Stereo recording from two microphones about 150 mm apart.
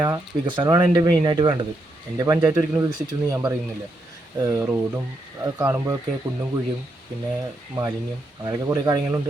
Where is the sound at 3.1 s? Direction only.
25° right (ahead or behind).